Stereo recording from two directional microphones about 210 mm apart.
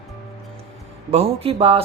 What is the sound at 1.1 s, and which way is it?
Speech, 30° right (ahead or behind).